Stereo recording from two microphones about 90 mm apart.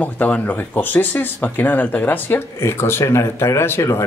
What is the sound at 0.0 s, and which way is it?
Speech, 15° left (ahead or behind).